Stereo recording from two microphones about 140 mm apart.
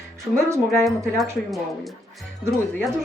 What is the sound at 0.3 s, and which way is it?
Speech, 20° right (ahead or behind).